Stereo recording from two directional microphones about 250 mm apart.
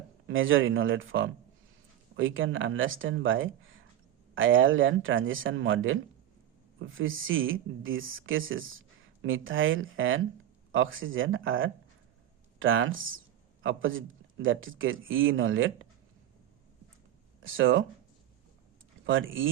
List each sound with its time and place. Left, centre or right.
0.3 s a man's voice: right
17.4 s speech: right
19.0 s a man's voice: right